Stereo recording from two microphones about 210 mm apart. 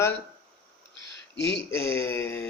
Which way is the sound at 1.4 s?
55° left (ahead or behind).